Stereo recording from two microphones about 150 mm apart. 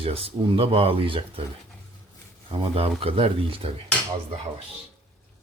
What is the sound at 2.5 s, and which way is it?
Speech, 35° right (ahead or behind).